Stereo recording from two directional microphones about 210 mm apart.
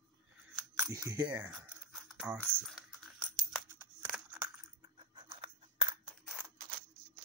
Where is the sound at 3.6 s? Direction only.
10° right (ahead or behind).